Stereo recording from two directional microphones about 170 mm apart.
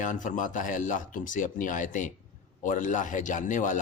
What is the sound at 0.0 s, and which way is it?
A man's voice, 50° left (ahead or behind).